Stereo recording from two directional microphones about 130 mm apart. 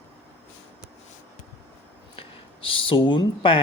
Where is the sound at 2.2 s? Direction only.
40° left (ahead or behind).